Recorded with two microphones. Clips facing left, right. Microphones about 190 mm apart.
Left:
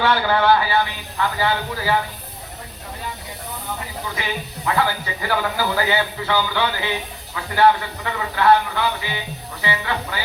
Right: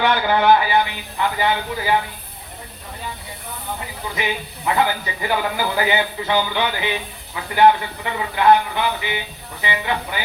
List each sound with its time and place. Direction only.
0.0 s a man's voice: 20° right (ahead or behind)
4.2 s a man's voice: 20° right (ahead or behind)